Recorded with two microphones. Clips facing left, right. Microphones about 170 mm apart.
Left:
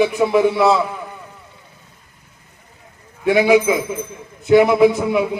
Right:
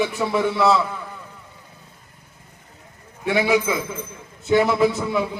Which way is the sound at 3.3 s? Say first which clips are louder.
Left 6 dB; 20° left (ahead or behind).